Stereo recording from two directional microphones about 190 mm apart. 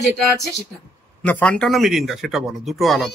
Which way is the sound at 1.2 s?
5° left (ahead or behind).